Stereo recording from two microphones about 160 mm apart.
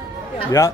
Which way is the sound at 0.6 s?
15° left (ahead or behind).